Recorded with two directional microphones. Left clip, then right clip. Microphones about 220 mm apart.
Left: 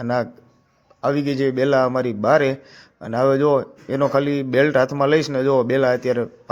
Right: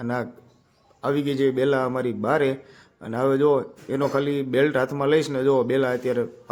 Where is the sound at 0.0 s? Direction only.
15° left (ahead or behind).